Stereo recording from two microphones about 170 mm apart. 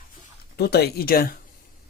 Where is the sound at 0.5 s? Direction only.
70° left (ahead or behind).